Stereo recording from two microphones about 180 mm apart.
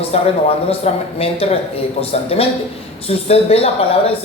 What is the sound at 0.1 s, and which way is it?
Speech, 35° left (ahead or behind).